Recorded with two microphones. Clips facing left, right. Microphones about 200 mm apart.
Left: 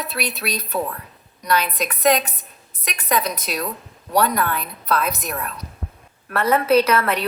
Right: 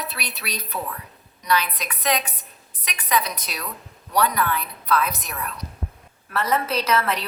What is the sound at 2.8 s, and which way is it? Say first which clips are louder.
A woman's voice: left 2 dB; 45° left (ahead or behind).